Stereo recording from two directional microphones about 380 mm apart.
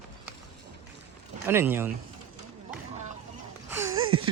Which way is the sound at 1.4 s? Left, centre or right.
Centre.